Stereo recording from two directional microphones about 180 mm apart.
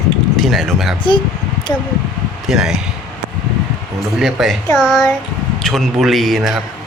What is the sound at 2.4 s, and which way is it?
Speech, 5° right (ahead or behind).